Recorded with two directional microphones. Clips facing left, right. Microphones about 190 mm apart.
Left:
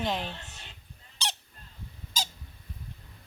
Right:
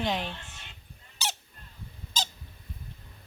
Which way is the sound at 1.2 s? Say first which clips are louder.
Right 1 dB; 5° right (ahead or behind).